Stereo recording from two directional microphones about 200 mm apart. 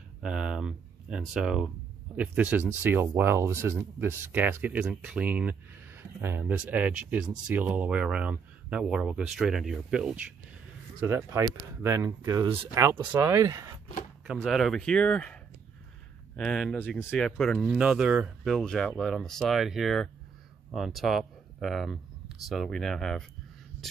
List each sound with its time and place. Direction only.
0.2 s speech: 5° right (ahead or behind)
11.0 s speech: 15° right (ahead or behind)
14.2 s speech: centre (ahead or behind)